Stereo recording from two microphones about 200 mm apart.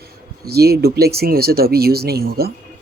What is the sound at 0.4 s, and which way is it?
Speech, 55° right (ahead or behind).